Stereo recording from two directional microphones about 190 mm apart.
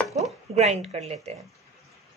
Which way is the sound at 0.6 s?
35° right (ahead or behind).